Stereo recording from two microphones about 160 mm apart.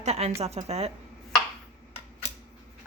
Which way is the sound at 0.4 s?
40° right (ahead or behind).